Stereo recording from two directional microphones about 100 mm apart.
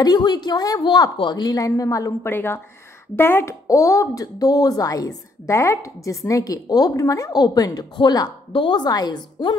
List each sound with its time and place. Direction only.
0.0 s a woman's voice: 45° left (ahead or behind)
2.3 s a woman's voice: 20° left (ahead or behind); by 9.6 s 45° left (ahead or behind)